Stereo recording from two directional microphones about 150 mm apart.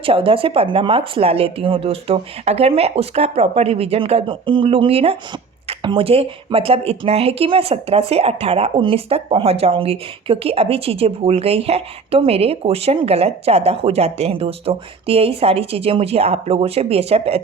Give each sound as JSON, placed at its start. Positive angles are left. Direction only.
{"t": 0.0, "sound": "speech", "side_deg": -35}